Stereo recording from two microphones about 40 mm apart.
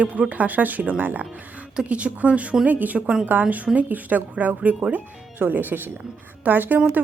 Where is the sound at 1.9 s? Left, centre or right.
Right.